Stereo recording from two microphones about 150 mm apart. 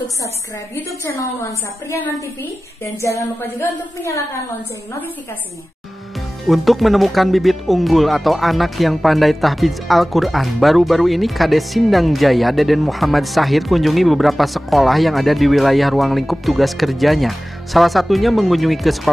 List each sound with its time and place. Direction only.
0.7 s a woman's voice: 20° left (ahead or behind)
6.4 s speech: centre (ahead or behind)